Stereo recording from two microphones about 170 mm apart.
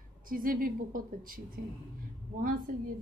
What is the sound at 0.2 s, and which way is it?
A woman's voice, 55° right (ahead or behind).